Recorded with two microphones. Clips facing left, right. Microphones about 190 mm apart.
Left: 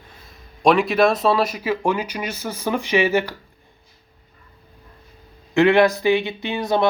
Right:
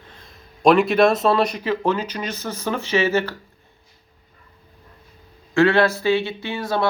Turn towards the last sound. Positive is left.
turn(degrees=20)  # may be behind; listen again after turning